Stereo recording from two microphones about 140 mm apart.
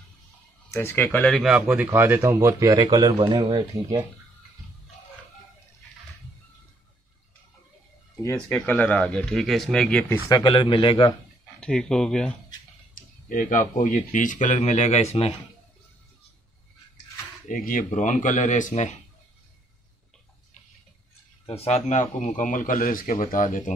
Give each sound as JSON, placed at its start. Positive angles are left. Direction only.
{"t": 0.7, "sound": "speech", "side_deg": 15}
{"t": 1.4, "sound": "speech", "side_deg": -5}
{"t": 8.5, "sound": "speech", "side_deg": 15}
{"t": 10.3, "sound": "a man's voice", "side_deg": 35}
{"t": 11.6, "sound": "speech", "side_deg": 5}
{"t": 12.9, "sound": "speech", "side_deg": 70}
{"t": 17.5, "sound": "speech", "side_deg": 70}
{"t": 21.5, "sound": "speech", "side_deg": 50}